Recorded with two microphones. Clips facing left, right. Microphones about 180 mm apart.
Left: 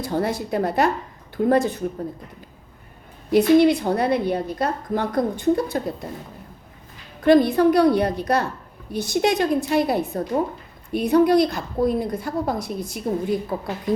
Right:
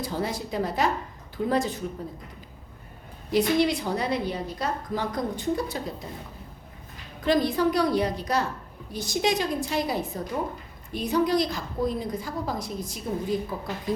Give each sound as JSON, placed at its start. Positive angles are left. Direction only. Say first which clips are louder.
{"t": 0.0, "sound": "a woman's voice", "louder": "left 6 dB", "side_deg": 60}
{"t": 3.3, "sound": "a woman's voice", "louder": "left 8 dB", "side_deg": 55}
{"t": 7.3, "sound": "a woman's voice", "louder": "left 8 dB", "side_deg": 60}